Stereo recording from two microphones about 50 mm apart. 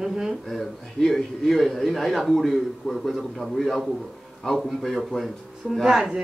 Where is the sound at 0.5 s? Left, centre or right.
Centre.